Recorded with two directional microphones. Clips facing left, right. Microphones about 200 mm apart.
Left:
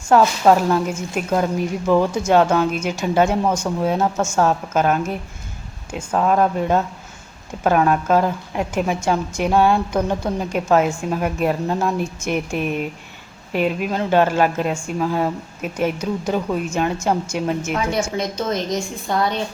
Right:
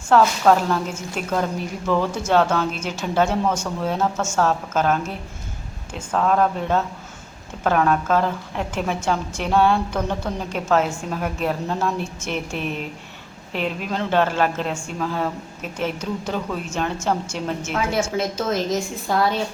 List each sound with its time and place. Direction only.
0.1 s a woman's voice: 15° left (ahead or behind)
17.7 s a woman's voice: 5° right (ahead or behind)